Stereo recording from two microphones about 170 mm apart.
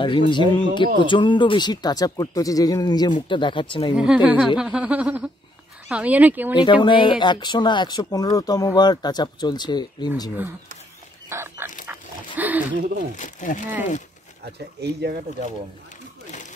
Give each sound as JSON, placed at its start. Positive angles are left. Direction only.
{"t": 0.0, "sound": "speech", "side_deg": 30}
{"t": 3.9, "sound": "a woman's voice", "side_deg": -5}
{"t": 4.6, "sound": "a sound", "side_deg": -5}
{"t": 6.6, "sound": "speech", "side_deg": 30}
{"t": 11.2, "sound": "bird", "side_deg": -15}
{"t": 11.9, "sound": "dog", "side_deg": -10}
{"t": 13.1, "sound": "speech", "side_deg": 50}
{"t": 14.4, "sound": "speech", "side_deg": -75}
{"t": 16.3, "sound": "a sound", "side_deg": 45}